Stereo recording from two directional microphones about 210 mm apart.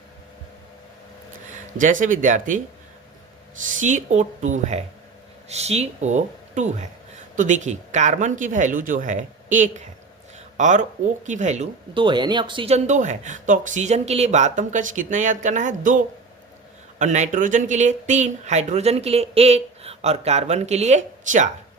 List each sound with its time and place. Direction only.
1.8 s speech: 40° right (ahead or behind)
3.8 s speech: 35° right (ahead or behind)